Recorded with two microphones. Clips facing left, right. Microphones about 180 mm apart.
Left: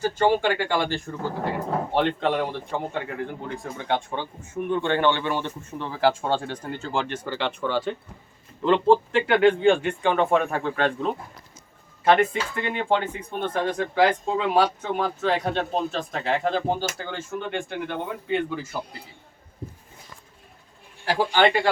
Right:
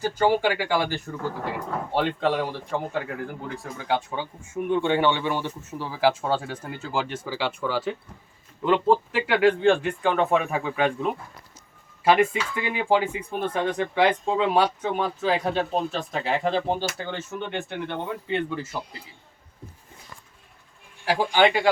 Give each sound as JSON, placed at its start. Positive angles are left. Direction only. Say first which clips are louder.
{"t": 0.2, "sound": "speech", "louder": "even", "side_deg": -10}
{"t": 21.0, "sound": "speech", "louder": "even", "side_deg": -10}